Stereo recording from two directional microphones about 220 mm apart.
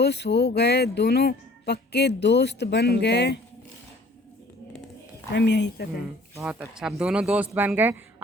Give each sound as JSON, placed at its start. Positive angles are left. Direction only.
{"t": 0.0, "sound": "speech", "side_deg": 50}
{"t": 5.3, "sound": "speech", "side_deg": 50}
{"t": 6.4, "sound": "speech", "side_deg": -5}